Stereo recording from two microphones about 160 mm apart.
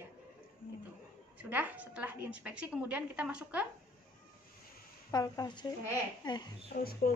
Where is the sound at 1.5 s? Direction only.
10° right (ahead or behind).